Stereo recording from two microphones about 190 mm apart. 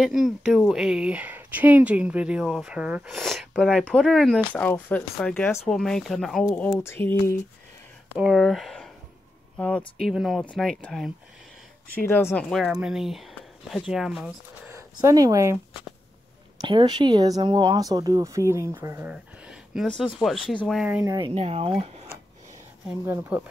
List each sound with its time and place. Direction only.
0.0 s speech: centre (ahead or behind)
8.2 s speech: centre (ahead or behind)
12.1 s speech: 10° left (ahead or behind)
12.4 s speech: centre (ahead or behind)
14.7 s speech: 15° right (ahead or behind)
16.6 s speech: 25° right (ahead or behind)
19.1 s a sound: 5° right (ahead or behind)
20.6 s speech: 5° right (ahead or behind)
21.1 s speech: 30° right (ahead or behind)
22.8 s speech: 5° right (ahead or behind)